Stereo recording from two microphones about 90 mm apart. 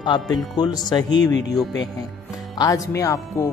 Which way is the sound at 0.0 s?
55° left (ahead or behind).